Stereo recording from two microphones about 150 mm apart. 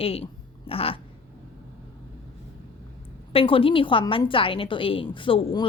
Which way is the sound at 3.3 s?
40° left (ahead or behind).